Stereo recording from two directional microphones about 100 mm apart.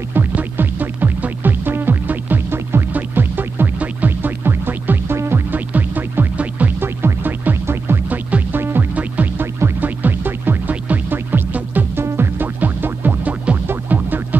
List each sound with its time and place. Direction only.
0.1 s music: 20° right (ahead or behind)